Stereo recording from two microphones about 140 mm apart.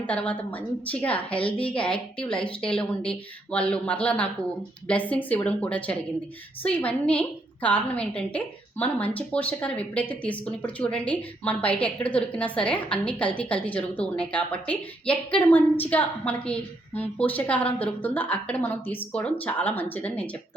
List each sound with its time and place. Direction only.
0.1 s a woman's voice: 10° left (ahead or behind)